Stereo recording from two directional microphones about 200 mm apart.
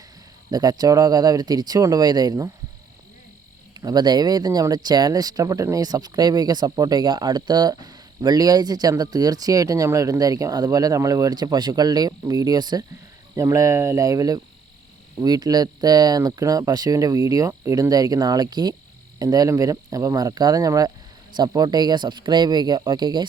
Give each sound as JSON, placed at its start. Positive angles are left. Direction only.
{"t": 0.5, "sound": "speech", "side_deg": -20}
{"t": 3.8, "sound": "speech", "side_deg": -20}